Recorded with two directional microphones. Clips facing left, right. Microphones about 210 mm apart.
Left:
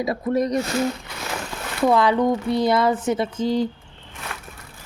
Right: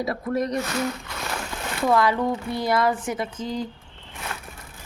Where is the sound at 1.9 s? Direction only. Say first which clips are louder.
Left 3 dB; 20° left (ahead or behind).